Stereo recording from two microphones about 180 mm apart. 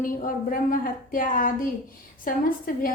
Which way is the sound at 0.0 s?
50° left (ahead or behind).